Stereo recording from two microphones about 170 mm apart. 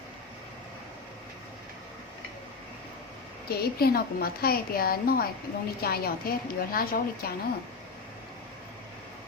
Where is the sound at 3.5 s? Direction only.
65° left (ahead or behind).